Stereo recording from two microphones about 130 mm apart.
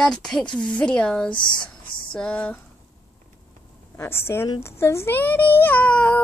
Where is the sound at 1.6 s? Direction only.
10° left (ahead or behind).